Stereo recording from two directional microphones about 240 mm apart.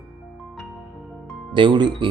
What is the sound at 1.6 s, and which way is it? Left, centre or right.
Speech, centre.